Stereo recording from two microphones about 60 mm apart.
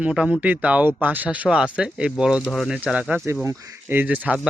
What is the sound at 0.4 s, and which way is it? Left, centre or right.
A man's voice, right.